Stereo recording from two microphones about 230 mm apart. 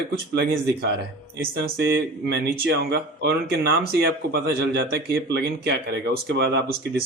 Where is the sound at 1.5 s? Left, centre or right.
Right.